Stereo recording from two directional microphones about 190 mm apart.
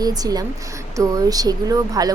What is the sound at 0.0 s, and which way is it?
A woman's voice, 20° right (ahead or behind).